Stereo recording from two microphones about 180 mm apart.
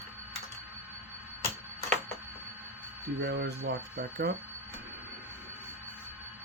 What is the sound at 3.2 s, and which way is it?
Speech, 85° right.